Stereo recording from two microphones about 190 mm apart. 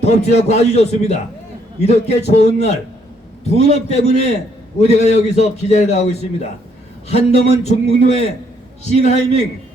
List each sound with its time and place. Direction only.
0.0 s a man's voice: 35° left (ahead or behind)